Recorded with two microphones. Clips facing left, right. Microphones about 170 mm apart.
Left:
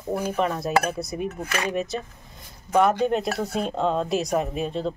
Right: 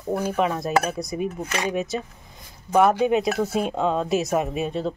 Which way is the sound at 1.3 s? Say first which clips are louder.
Right 1 dB; 15° right (ahead or behind).